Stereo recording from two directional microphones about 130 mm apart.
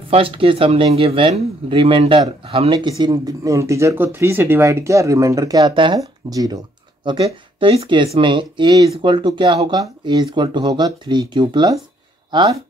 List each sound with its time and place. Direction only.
0.1 s speech: 45° right (ahead or behind)
2.7 s speech: 35° right (ahead or behind)
7.1 s speech: 40° right (ahead or behind)